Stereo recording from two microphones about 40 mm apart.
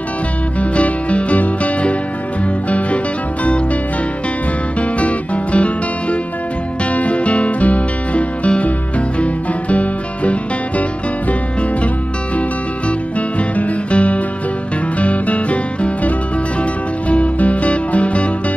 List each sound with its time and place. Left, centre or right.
0.6 s music: left
4.7 s music: left
13.4 s music: left
17.1 s music: left